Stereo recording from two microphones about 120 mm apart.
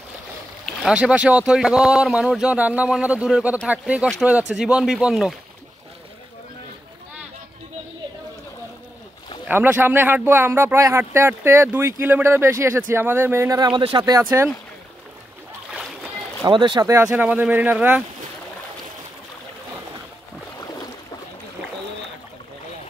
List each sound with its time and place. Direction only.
0.8 s speech: 10° right (ahead or behind)
9.5 s speech: 15° right (ahead or behind)
13.6 s speech: 40° right (ahead or behind)
16.4 s speech: 40° right (ahead or behind)
16.8 s speech: 25° right (ahead or behind)
17.2 s speech: 15° right (ahead or behind)